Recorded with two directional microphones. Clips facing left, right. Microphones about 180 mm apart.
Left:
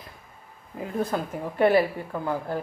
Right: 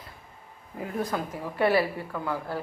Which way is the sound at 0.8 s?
25° left (ahead or behind).